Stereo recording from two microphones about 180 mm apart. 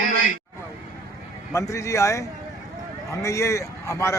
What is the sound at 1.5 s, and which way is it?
Speech, 15° left (ahead or behind).